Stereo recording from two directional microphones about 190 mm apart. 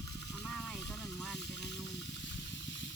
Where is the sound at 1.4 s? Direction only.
65° left (ahead or behind).